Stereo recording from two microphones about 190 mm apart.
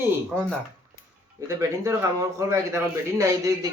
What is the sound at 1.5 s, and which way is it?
Speech, 15° right (ahead or behind).